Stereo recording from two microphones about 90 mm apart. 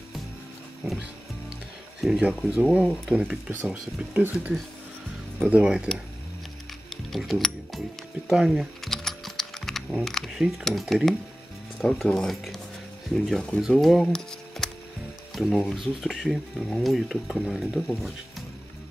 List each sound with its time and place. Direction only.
0.8 s music: 20° right (ahead or behind)
2.0 s a sound: 5° right (ahead or behind)
2.7 s speech: 5° right (ahead or behind)
7.1 s gears: centre (ahead or behind)
8.3 s typing: 5° right (ahead or behind)
10.6 s speech: centre (ahead or behind)